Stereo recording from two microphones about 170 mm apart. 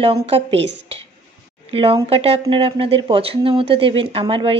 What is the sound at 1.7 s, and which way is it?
Speech, 35° right (ahead or behind).